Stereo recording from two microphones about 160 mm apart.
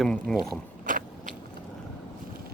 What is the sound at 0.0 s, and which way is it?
Speech, 5° left (ahead or behind).